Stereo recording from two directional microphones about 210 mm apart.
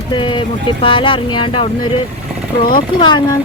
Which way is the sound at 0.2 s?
25° left (ahead or behind).